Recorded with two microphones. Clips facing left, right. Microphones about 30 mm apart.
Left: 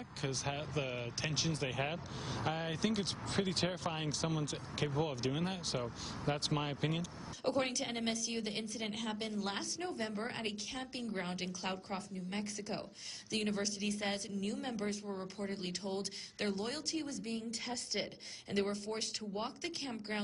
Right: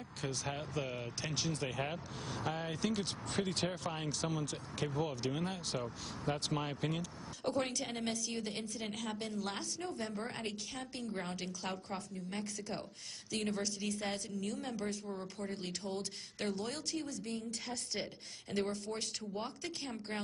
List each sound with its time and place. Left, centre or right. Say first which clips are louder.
0.2 s speech: left 1 dB; centre